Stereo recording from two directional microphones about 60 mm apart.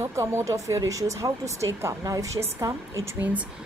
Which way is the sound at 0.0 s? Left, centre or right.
Right.